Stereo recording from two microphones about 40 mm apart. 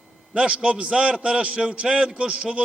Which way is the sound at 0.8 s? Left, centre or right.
Centre.